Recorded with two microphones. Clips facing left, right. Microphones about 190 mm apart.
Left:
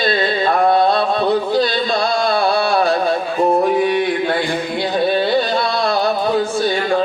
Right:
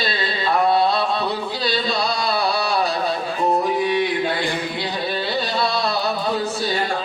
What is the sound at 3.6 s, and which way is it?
Music, 55° left (ahead or behind).